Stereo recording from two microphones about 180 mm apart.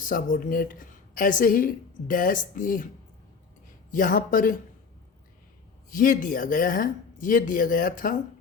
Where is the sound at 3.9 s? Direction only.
50° left (ahead or behind).